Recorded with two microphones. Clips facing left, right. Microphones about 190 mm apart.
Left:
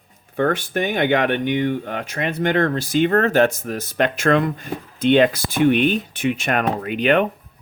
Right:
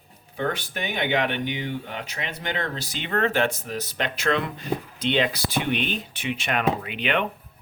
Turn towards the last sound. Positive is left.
turn(degrees=45)  # may be behind; listen again after turning